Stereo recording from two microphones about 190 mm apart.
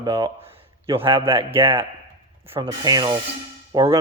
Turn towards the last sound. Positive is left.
turn(degrees=-15)  # may be behind; listen again after turning